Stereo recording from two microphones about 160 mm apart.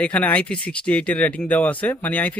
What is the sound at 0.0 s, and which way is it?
Speech, 10° left (ahead or behind).